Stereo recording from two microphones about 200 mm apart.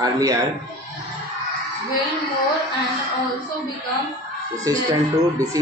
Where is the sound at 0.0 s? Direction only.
15° right (ahead or behind).